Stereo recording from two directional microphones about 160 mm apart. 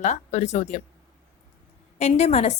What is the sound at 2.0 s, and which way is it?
Speech, 45° left (ahead or behind).